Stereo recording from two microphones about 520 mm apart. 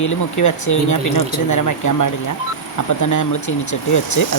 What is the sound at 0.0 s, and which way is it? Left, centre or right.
Speech, left.